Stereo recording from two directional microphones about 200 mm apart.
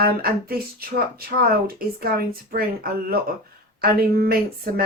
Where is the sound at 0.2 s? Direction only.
50° right (ahead or behind).